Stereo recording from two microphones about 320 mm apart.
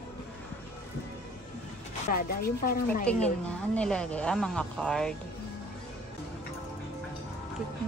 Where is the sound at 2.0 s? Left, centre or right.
Left.